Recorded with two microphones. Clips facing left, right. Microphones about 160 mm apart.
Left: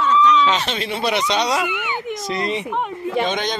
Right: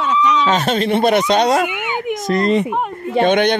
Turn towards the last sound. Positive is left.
turn(degrees=-65)  # may be behind; listen again after turning